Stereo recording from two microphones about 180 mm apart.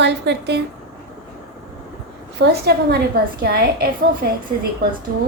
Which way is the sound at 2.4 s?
60° right (ahead or behind).